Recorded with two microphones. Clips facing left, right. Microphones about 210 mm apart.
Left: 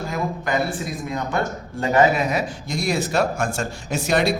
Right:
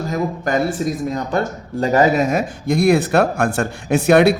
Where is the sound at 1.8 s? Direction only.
40° right (ahead or behind).